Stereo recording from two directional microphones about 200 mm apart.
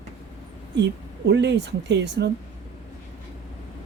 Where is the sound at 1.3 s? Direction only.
60° right (ahead or behind).